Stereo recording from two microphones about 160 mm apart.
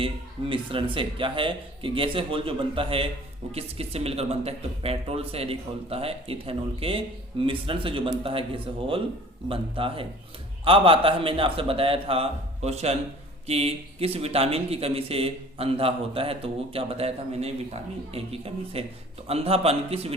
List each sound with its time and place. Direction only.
0.0 s speech: 35° right (ahead or behind)